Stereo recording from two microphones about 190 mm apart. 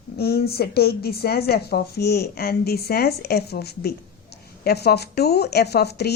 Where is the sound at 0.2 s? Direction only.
55° left (ahead or behind).